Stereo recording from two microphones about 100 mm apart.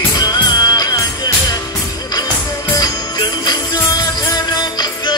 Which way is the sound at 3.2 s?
45° left (ahead or behind).